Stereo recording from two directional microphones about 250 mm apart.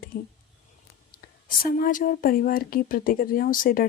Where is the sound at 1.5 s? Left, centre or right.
Left.